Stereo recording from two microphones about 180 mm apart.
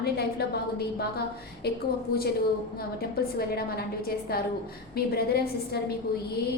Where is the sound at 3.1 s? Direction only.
60° left (ahead or behind).